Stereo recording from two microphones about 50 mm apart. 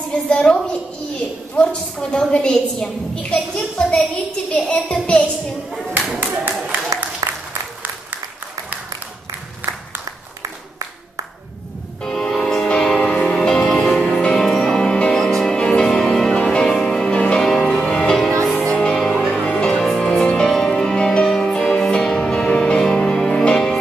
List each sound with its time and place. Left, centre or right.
0.1 s a woman's voice: centre
6.1 s a sound: right
9.6 s applause: right
12.0 s music: centre
17.4 s music: centre
19.2 s music: left